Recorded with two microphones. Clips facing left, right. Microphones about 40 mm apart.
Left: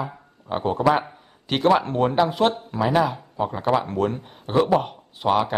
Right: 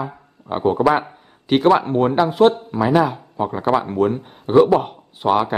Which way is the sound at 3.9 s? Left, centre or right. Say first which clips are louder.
Right 5 dB; centre.